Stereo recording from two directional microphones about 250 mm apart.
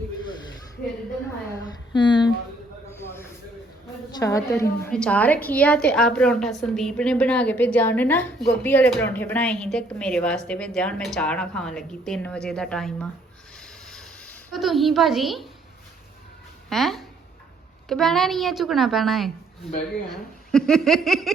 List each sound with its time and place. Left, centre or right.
1.9 s speech: centre
4.1 s a woman's voice: centre
13.6 s a sound: centre
16.6 s a woman's voice: centre